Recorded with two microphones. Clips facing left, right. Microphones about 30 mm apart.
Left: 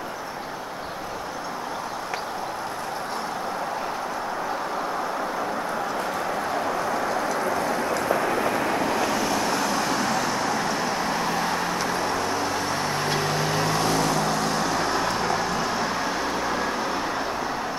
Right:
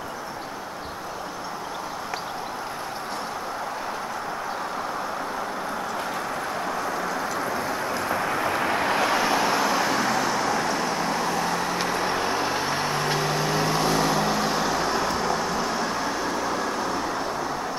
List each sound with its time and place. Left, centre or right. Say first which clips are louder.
6.9 s vehicle: left 2 dB; centre
8.5 s vehicle: right 1 dB; right; by 11.7 s centre
12.1 s vehicle: right 1 dB; centre
12.9 s vehicle: even; centre